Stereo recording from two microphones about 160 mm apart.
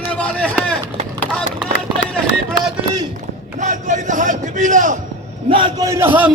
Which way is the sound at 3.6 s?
50° right (ahead or behind).